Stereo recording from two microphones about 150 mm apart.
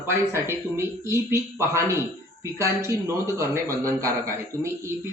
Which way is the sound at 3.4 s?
20° right (ahead or behind).